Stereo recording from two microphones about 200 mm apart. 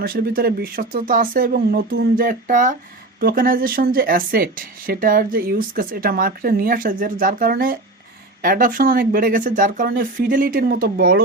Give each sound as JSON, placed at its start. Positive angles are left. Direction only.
{"t": 0.0, "sound": "speech", "side_deg": -50}